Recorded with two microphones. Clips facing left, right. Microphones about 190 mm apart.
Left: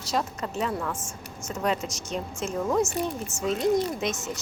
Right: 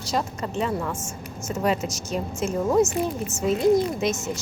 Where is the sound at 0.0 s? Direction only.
Centre (ahead or behind).